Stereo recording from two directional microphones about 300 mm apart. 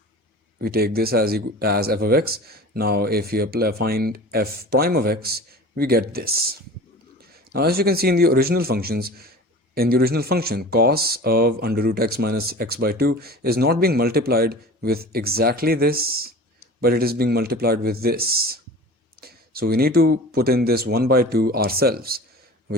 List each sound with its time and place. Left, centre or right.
0.6 s speech: right
7.5 s speech: right